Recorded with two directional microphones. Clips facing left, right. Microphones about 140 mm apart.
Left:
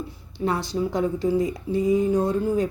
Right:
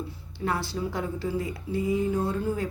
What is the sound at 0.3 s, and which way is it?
A woman's voice, 20° left (ahead or behind).